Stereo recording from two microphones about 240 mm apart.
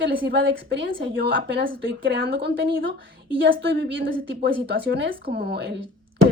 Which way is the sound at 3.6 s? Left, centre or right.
Right.